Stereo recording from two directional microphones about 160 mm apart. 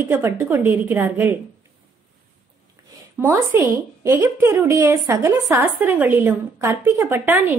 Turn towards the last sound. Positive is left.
turn(degrees=-10)  # may be behind; listen again after turning